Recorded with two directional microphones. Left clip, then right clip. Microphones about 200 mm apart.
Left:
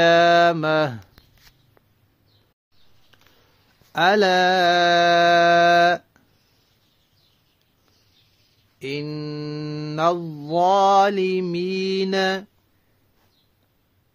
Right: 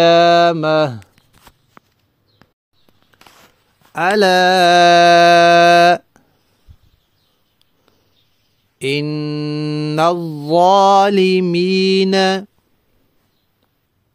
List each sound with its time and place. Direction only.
0.0 s mantra: 30° right (ahead or behind)
3.9 s speech: 15° right (ahead or behind)
4.2 s mantra: 30° right (ahead or behind); by 6.2 s 50° right (ahead or behind)
8.7 s mantra: 50° right (ahead or behind)